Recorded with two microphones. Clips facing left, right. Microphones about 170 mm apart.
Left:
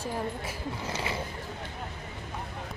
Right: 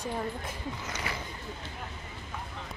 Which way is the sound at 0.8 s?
30° left (ahead or behind).